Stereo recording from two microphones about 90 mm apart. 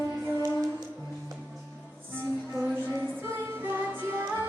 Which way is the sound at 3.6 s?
25° right (ahead or behind).